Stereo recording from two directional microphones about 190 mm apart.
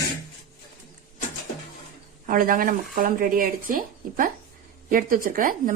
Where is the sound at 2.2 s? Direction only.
45° right (ahead or behind).